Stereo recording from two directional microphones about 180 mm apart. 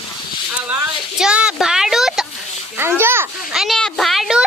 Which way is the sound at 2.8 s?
15° right (ahead or behind).